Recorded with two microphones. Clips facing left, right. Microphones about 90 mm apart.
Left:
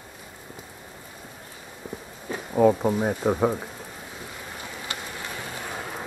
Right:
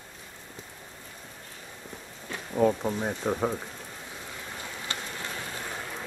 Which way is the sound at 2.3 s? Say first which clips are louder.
Left 5 dB; 15° left (ahead or behind).